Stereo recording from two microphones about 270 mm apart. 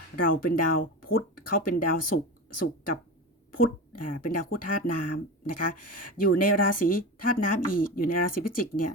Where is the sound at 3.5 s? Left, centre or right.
Left.